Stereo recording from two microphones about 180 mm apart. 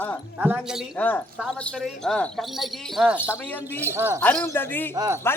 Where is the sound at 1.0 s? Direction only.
10° left (ahead or behind).